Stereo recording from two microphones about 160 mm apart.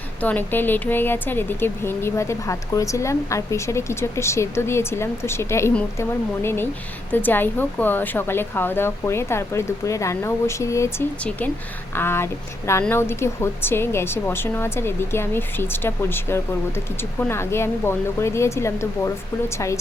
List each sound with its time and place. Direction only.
0.2 s speech: 10° left (ahead or behind)